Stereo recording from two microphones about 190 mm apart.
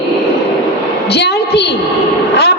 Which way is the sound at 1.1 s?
60° left (ahead or behind).